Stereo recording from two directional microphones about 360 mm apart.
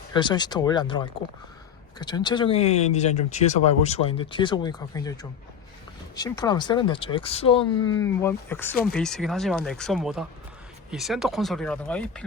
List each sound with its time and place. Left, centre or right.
0.1 s speech: centre
6.1 s speech: centre